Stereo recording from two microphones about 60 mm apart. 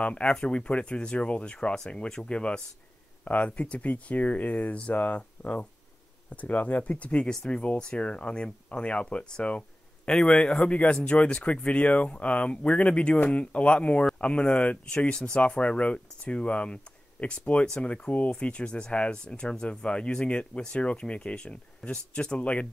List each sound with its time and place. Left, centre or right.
0.0 s speech: centre